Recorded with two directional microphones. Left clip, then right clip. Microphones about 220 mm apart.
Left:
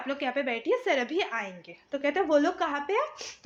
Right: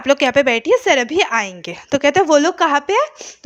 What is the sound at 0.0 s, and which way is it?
Speech, 50° right (ahead or behind).